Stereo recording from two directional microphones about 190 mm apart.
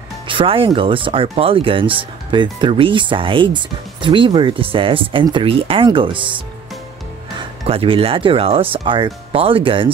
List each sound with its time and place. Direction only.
0.3 s speech: 30° right (ahead or behind)